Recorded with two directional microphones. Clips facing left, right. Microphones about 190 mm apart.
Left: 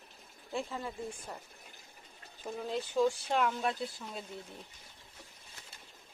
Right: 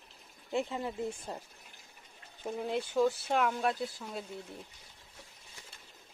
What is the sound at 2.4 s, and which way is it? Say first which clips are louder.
Speech: right 2 dB; 15° right (ahead or behind).